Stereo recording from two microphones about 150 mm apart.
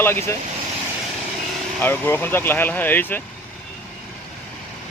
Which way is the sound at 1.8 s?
15° left (ahead or behind).